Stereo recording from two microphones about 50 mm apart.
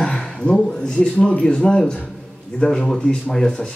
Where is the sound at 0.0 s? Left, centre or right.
Centre.